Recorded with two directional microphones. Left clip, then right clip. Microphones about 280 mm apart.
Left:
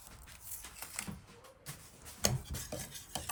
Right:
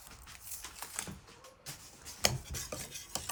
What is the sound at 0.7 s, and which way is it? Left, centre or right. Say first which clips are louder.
Typewriter: right 1 dB; right.